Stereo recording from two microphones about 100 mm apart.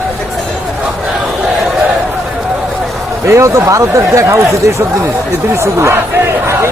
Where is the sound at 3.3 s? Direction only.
30° right (ahead or behind).